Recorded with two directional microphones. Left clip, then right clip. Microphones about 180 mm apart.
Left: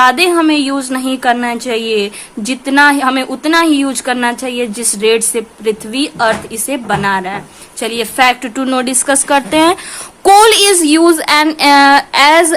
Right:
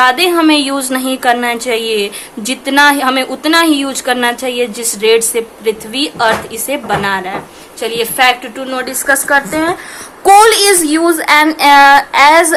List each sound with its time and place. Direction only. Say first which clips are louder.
0.0 s a woman's voice: left 1 dB; 30° left (ahead or behind)
0.3 s a woman's voice: right 1 dB; 15° left (ahead or behind); by 9.7 s 50° left (ahead or behind)
10.2 s speech: even; 35° left (ahead or behind)